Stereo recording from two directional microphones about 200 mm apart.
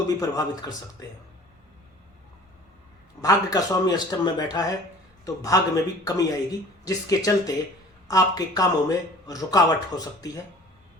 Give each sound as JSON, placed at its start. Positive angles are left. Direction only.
{"t": 0.2, "sound": "speech", "side_deg": 15}
{"t": 3.2, "sound": "speech", "side_deg": 20}